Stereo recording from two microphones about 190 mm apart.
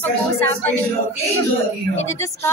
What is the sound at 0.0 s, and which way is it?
Speech, 10° left (ahead or behind).